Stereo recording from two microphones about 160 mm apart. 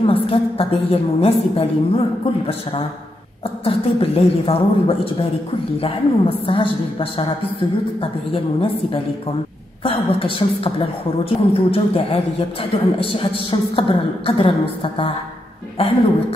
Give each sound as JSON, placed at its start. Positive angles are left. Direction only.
{"t": 0.0, "sound": "a woman's voice", "side_deg": 35}